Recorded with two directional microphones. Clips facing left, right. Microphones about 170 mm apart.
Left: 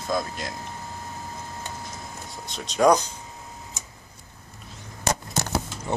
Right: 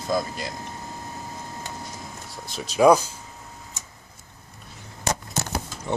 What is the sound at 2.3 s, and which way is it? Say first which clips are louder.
Speech: right 4 dB; 5° right (ahead or behind).